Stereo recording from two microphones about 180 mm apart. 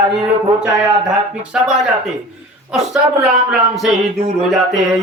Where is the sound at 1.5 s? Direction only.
Centre (ahead or behind).